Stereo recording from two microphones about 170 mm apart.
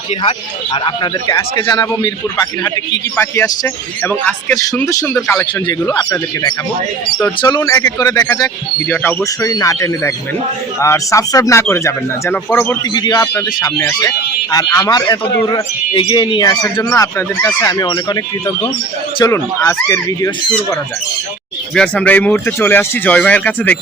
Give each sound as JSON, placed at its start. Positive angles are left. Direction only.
{"t": 0.2, "sound": "a man's voice", "side_deg": 30}
{"t": 1.3, "sound": "a man's voice", "side_deg": 20}
{"t": 5.6, "sound": "a man's voice", "side_deg": 25}
{"t": 12.9, "sound": "a man's voice", "side_deg": 25}
{"t": 21.8, "sound": "speech", "side_deg": 5}